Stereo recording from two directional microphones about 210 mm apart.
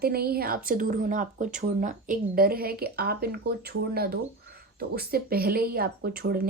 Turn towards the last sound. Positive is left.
turn(degrees=-45)  # may be behind; listen again after turning